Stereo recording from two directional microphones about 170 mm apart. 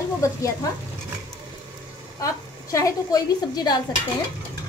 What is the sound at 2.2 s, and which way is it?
A woman's voice, 20° left (ahead or behind).